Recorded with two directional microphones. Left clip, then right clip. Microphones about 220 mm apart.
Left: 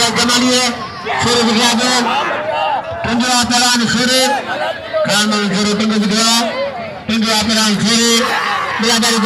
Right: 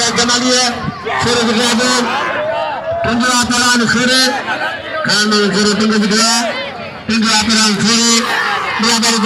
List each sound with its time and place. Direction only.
0.0 s a sound: 45° left (ahead or behind)
1.2 s music: 15° left (ahead or behind)
1.5 s a man's voice: 30° left (ahead or behind)
3.2 s a sound: 10° left (ahead or behind)
4.0 s a man's voice: 40° left (ahead or behind)
7.4 s speech: 55° left (ahead or behind)